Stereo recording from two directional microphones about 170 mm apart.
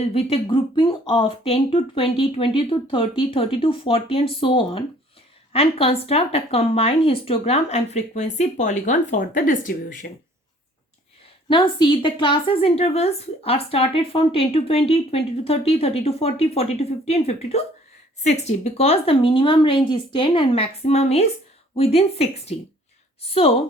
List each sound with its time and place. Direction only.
0.0 s a woman's voice: 35° left (ahead or behind); by 10.1 s 50° left (ahead or behind)
11.4 s a woman's voice: 30° left (ahead or behind)